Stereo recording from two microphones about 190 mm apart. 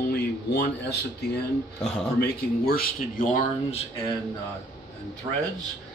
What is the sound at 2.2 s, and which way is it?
Speech, 55° left (ahead or behind).